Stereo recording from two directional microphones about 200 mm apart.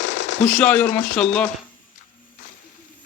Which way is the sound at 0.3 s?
5° left (ahead or behind).